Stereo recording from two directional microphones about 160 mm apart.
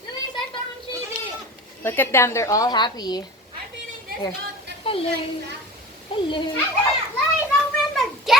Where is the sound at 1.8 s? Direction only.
15° left (ahead or behind).